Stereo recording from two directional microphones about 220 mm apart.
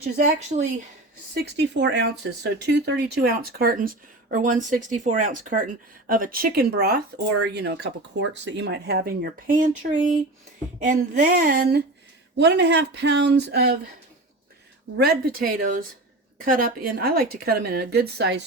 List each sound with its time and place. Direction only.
1.3 s speech: 50° right (ahead or behind)
14.9 s speech: 45° right (ahead or behind)